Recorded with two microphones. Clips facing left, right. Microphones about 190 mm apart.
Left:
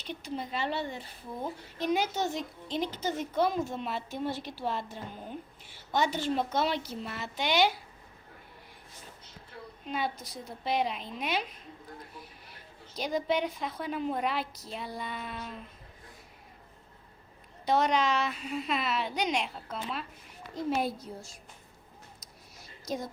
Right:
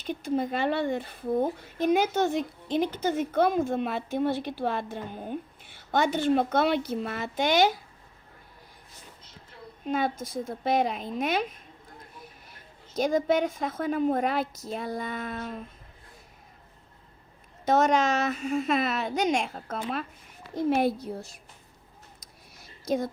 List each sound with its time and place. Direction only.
0.0 s speech: 50° right (ahead or behind)
9.8 s a woman's voice: 50° right (ahead or behind)
13.0 s a woman's voice: 45° right (ahead or behind)
17.7 s a woman's voice: 45° right (ahead or behind)
20.7 s speech: 60° right (ahead or behind)
22.9 s speech: 60° right (ahead or behind)